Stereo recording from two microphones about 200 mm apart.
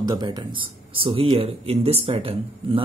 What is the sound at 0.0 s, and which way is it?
Speech, 20° right (ahead or behind).